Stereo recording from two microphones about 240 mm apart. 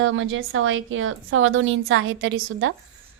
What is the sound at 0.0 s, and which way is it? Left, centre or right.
A woman's voice, right.